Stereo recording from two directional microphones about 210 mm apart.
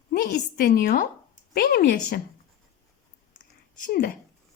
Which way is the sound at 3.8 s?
40° left (ahead or behind).